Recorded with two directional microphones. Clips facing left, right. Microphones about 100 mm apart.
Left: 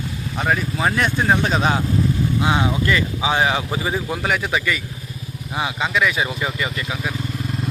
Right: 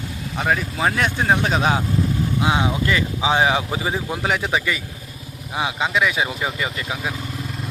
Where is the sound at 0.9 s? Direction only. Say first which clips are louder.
Left 2 dB; 5° right (ahead or behind).